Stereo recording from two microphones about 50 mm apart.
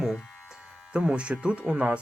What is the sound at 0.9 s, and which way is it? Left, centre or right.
Speech, right.